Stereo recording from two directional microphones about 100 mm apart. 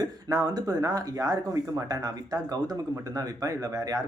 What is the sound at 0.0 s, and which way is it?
Speech, 40° right (ahead or behind).